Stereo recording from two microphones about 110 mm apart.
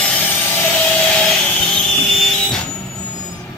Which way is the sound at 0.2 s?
15° left (ahead or behind).